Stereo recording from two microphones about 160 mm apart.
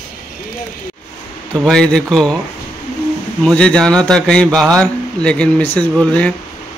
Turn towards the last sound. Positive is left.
turn(degrees=10)  # may be behind; listen again after turning